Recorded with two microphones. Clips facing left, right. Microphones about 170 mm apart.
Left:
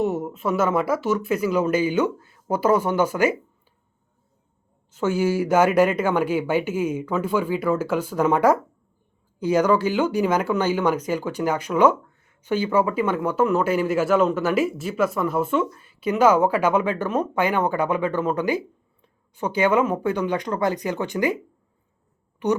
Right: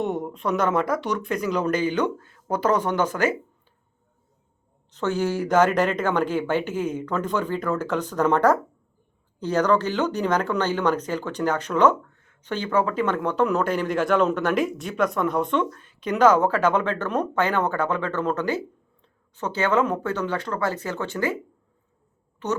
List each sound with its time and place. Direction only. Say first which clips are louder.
0.0 s speech: left 2 dB; 5° left (ahead or behind)
4.9 s speech: left 3 dB; 10° left (ahead or behind)
22.4 s speech: left 5 dB; 10° left (ahead or behind)